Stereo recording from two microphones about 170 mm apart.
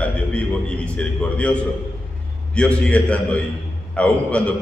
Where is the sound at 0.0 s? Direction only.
5° left (ahead or behind).